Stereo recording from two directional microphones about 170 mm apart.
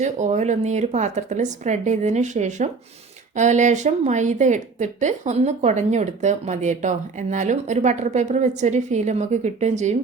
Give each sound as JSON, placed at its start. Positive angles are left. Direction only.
{"t": 0.0, "sound": "a woman's voice", "side_deg": -45}